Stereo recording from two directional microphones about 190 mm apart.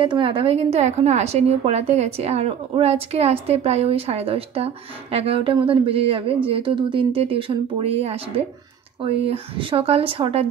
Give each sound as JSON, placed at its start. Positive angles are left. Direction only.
{"t": 0.0, "sound": "a woman's voice", "side_deg": -25}